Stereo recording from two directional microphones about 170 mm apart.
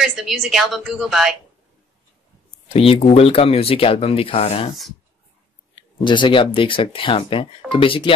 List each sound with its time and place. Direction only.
0.0 s a woman's voice: centre (ahead or behind)
2.7 s speech: 35° left (ahead or behind)
5.8 s speech: 30° left (ahead or behind)